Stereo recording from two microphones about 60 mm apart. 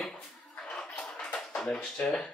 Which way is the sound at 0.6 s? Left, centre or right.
Centre.